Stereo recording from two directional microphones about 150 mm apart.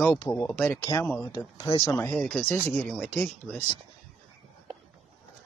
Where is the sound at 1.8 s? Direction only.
15° left (ahead or behind).